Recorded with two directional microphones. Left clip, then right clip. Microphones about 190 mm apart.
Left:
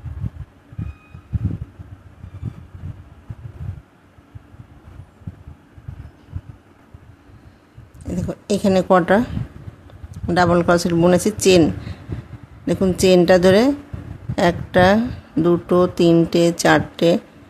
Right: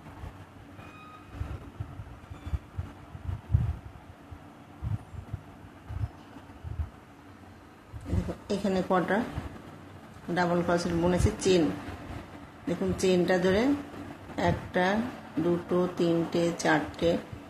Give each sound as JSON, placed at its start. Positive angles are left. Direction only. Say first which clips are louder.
{"t": 8.5, "sound": "speech", "louder": "left 13 dB", "side_deg": 60}
{"t": 10.3, "sound": "speech", "louder": "left 12 dB", "side_deg": 65}
{"t": 12.6, "sound": "a woman's voice", "louder": "left 12 dB", "side_deg": 65}